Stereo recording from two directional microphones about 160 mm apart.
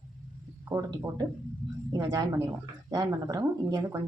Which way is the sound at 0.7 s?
20° right (ahead or behind).